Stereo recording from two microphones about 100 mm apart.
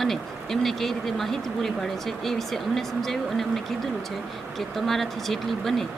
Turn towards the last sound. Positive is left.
turn(degrees=0)  # may be behind; listen again after turning